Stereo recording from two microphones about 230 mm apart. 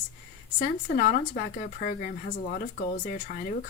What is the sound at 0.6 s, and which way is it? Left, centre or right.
A woman's voice, left.